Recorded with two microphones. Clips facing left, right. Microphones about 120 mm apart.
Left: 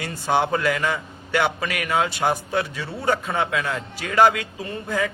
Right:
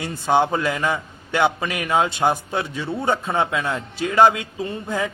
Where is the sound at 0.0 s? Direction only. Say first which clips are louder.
Right 3 dB; 20° right (ahead or behind).